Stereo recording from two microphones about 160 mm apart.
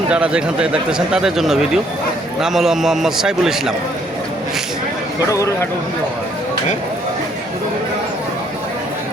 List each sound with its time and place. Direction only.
0.1 s speech: 5° right (ahead or behind)
5.3 s speech: 20° left (ahead or behind)